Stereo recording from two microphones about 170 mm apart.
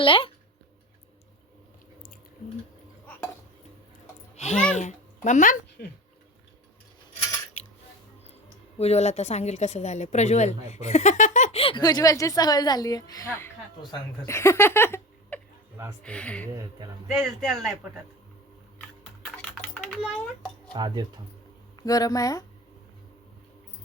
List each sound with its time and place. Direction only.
0.0 s a woman's voice: 30° left (ahead or behind)
4.4 s a sound: 40° left (ahead or behind)
4.7 s speech: 45° left (ahead or behind)
8.8 s a woman's voice: 40° left (ahead or behind); by 17.7 s centre (ahead or behind)
19.2 s typing: centre (ahead or behind)
20.7 s speech: 25° right (ahead or behind)
21.8 s speech: 20° left (ahead or behind)